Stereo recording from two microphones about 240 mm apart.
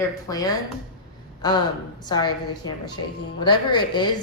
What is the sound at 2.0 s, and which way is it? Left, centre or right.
A woman's voice, centre.